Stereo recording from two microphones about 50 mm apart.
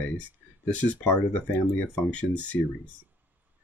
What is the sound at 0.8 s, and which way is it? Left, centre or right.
Speech, left.